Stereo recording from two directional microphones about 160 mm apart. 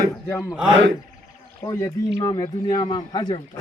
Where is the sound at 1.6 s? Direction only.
20° left (ahead or behind).